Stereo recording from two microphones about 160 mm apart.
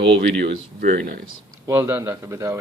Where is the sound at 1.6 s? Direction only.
15° right (ahead or behind).